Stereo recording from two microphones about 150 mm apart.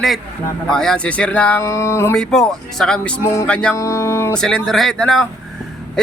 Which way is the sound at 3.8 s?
20° left (ahead or behind).